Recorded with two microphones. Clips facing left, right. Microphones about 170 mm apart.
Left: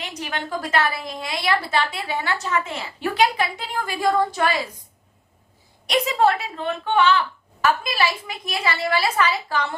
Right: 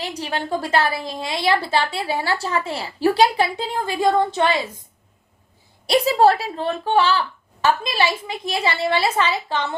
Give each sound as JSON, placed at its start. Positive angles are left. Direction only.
{"t": 0.0, "sound": "a woman's voice", "side_deg": -30}
{"t": 5.8, "sound": "speech", "side_deg": -35}